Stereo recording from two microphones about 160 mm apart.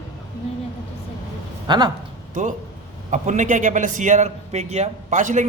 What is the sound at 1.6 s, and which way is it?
Speech, 25° right (ahead or behind).